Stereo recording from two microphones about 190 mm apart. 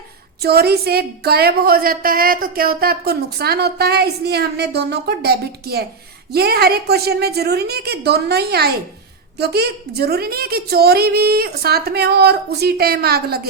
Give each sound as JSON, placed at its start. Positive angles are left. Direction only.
{"t": 0.4, "sound": "a woman's voice", "side_deg": -55}